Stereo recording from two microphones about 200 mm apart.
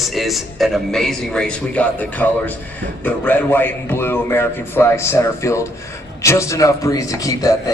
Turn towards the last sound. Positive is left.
turn(degrees=15)  # may be behind; listen again after turning